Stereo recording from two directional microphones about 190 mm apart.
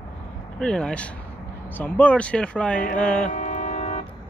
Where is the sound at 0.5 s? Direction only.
5° left (ahead or behind).